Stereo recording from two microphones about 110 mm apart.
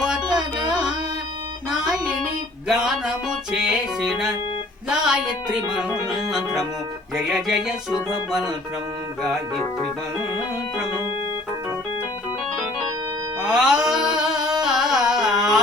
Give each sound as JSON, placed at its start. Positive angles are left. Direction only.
{"t": 0.0, "sound": "music", "side_deg": -5}
{"t": 0.3, "sound": "music", "side_deg": -40}
{"t": 1.7, "sound": "music", "side_deg": -5}
{"t": 4.9, "sound": "speech", "side_deg": -5}
{"t": 6.3, "sound": "music", "side_deg": -5}
{"t": 13.4, "sound": "carnatic music", "side_deg": -5}